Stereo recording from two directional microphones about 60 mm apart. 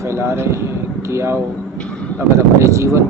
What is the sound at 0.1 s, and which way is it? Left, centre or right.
Speech, right.